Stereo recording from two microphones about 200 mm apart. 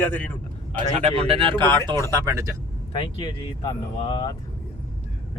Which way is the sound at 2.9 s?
25° left (ahead or behind).